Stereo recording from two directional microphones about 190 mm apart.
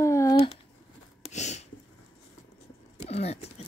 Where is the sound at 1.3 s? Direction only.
35° left (ahead or behind).